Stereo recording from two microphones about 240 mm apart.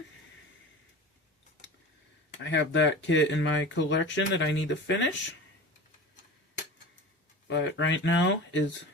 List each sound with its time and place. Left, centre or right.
2.4 s speech: left
7.4 s speech: left